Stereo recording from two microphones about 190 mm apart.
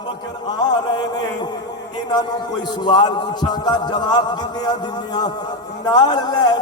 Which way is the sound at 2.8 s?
20° left (ahead or behind).